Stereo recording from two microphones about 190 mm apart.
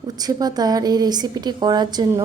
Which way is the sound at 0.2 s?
20° right (ahead or behind).